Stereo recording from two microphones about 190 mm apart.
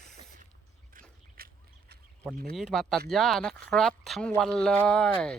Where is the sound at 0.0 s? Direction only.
55° right (ahead or behind).